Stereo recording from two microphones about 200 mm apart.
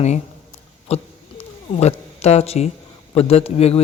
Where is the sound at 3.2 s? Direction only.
30° left (ahead or behind).